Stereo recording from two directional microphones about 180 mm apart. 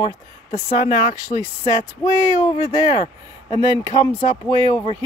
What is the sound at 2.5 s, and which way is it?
Speech, 25° right (ahead or behind).